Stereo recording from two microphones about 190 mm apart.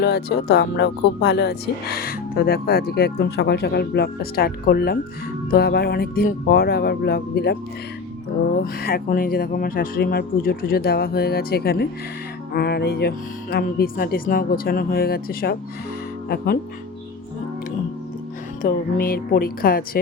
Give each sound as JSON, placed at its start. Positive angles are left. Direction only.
{"t": 0.0, "sound": "speech", "side_deg": 60}
{"t": 8.5, "sound": "speech", "side_deg": 50}
{"t": 18.6, "sound": "speech", "side_deg": 50}